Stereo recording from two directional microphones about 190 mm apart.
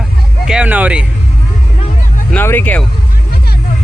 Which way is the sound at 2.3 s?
10° left (ahead or behind).